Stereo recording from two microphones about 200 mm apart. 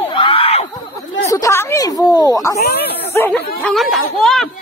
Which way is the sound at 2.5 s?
50° left (ahead or behind).